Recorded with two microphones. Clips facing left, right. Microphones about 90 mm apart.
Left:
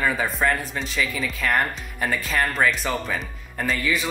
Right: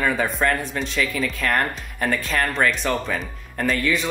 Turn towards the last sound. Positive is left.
turn(degrees=0)  # may be behind; listen again after turning